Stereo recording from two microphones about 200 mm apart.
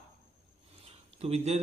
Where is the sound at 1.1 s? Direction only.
30° right (ahead or behind).